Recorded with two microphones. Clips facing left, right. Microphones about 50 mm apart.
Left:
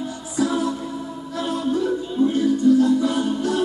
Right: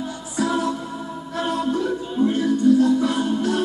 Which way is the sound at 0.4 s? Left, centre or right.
Right.